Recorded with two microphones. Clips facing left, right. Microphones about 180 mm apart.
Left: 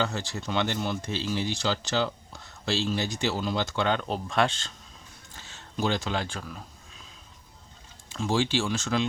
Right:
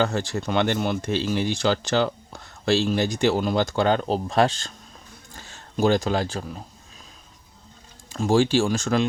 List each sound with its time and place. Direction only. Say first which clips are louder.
0.0 s speech: right 6 dB; 50° right (ahead or behind); by 6.6 s 35° right (ahead or behind)
8.1 s speech: right 7 dB; 45° right (ahead or behind)